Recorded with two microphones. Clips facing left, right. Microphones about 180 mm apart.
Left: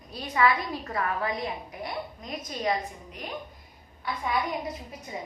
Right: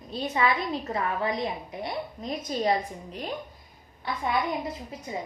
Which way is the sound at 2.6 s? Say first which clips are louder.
Right 1 dB; 30° right (ahead or behind).